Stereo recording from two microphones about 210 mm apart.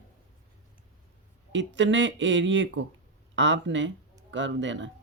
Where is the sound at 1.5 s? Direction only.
60° right (ahead or behind).